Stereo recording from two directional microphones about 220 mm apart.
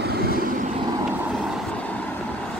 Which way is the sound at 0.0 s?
45° right (ahead or behind).